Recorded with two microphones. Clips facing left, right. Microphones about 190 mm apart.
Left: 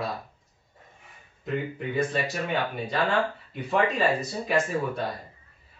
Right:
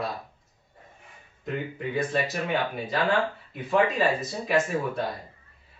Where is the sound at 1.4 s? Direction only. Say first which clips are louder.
Left 1 dB; centre (ahead or behind).